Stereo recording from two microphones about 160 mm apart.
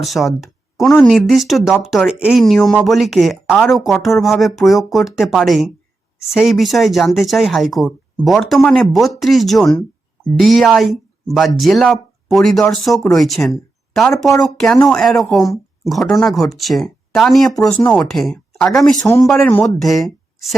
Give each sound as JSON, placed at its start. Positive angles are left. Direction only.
{"t": 0.0, "sound": "speech", "side_deg": 0}
{"t": 19.0, "sound": "speech", "side_deg": 20}
{"t": 19.3, "sound": "speech", "side_deg": 5}